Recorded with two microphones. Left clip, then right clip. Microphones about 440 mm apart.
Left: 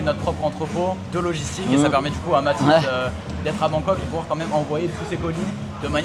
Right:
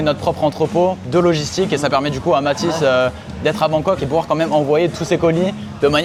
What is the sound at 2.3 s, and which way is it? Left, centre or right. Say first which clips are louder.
Speech: even; right.